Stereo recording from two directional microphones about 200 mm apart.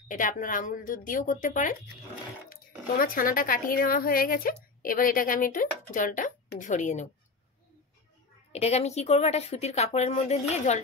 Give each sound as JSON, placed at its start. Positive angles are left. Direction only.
{"t": 0.1, "sound": "speech", "side_deg": 40}
{"t": 8.5, "sound": "speech", "side_deg": 30}